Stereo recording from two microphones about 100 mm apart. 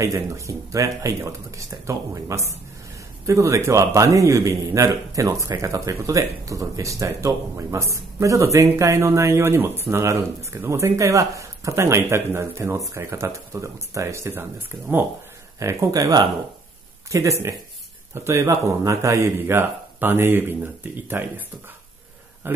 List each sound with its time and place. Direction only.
0.0 s speech: 30° right (ahead or behind)
15.6 s speech: 30° right (ahead or behind)